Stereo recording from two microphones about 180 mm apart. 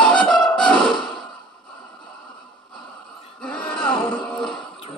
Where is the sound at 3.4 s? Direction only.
5° left (ahead or behind).